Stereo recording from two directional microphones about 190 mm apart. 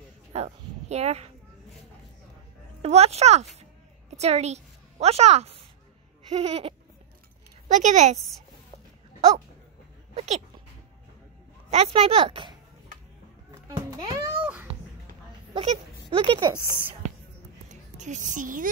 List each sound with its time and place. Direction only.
0.3 s speech: 35° right (ahead or behind)
2.8 s a woman's voice: 35° right (ahead or behind)
10.1 s speech: 35° right (ahead or behind)
11.7 s speech: 30° right (ahead or behind)
13.7 s babbling: 15° right (ahead or behind)
14.4 s a sound: 5° right (ahead or behind)
15.5 s speech: 30° right (ahead or behind)
17.9 s a woman's voice: 40° right (ahead or behind)